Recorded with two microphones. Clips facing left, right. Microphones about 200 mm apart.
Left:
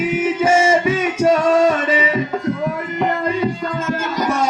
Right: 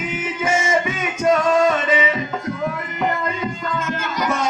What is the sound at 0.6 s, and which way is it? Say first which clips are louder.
Music: left 6 dB; 30° left (ahead or behind).